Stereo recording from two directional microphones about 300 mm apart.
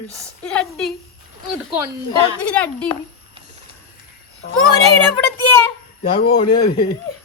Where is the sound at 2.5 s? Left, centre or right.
Centre.